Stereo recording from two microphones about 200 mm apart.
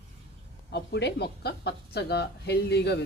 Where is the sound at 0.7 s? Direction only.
55° left (ahead or behind).